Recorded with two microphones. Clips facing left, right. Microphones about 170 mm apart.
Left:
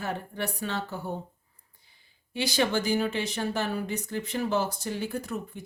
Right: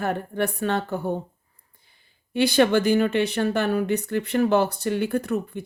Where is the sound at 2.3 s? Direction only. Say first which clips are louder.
Right 8 dB; 60° right (ahead or behind).